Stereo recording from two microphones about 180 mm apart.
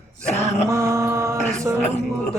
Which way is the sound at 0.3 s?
40° left (ahead or behind).